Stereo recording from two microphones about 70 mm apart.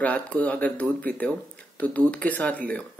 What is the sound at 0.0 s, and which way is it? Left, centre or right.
Speech, left.